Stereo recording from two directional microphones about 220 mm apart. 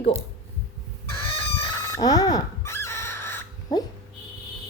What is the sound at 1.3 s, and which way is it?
Fowl, 25° left (ahead or behind).